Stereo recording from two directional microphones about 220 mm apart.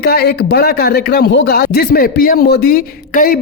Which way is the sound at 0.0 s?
45° left (ahead or behind).